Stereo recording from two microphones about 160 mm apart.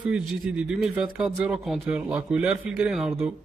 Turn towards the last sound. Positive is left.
turn(degrees=-5)  # may be behind; listen again after turning